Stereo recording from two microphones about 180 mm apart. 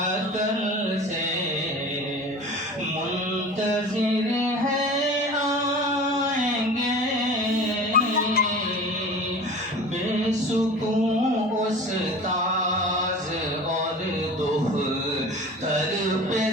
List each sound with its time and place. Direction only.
7.9 s music: 60° left (ahead or behind)